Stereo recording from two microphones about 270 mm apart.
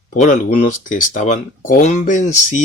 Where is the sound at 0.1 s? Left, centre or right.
Left.